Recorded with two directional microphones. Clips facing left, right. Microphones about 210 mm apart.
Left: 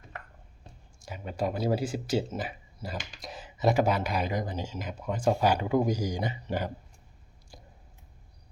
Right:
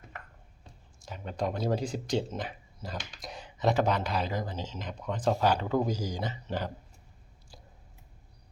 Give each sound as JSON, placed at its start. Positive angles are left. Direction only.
{"t": 1.0, "sound": "speech", "side_deg": 5}
{"t": 7.5, "sound": "chewing", "side_deg": 15}